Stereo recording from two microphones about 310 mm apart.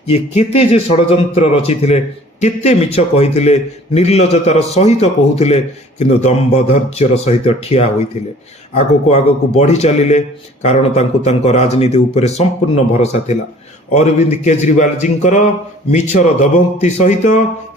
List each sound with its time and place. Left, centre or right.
0.1 s a man's voice: centre